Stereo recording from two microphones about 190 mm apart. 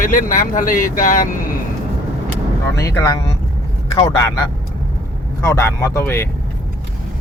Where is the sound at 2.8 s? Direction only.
15° left (ahead or behind).